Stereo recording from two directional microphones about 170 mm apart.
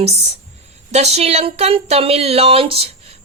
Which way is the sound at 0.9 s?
40° right (ahead or behind).